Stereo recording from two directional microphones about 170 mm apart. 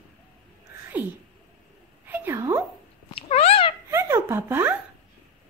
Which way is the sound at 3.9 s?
15° right (ahead or behind).